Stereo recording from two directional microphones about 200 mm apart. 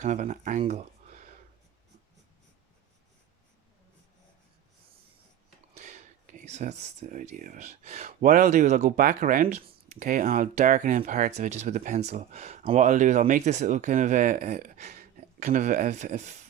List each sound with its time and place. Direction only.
0.0 s speech: 35° right (ahead or behind)
5.7 s speech: 40° right (ahead or behind)